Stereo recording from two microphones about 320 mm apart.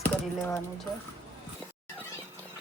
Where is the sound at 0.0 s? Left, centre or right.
Centre.